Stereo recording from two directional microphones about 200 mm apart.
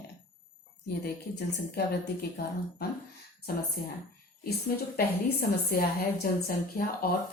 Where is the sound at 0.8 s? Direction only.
55° left (ahead or behind).